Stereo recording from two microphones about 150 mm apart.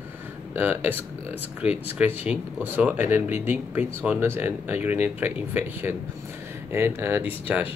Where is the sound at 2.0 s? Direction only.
10° right (ahead or behind).